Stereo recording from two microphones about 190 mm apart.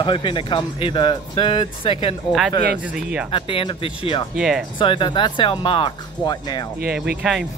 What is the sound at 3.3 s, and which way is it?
Speech, 25° left (ahead or behind).